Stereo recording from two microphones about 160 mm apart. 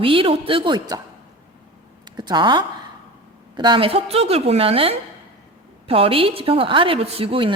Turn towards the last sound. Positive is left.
turn(degrees=-35)  # may be behind; listen again after turning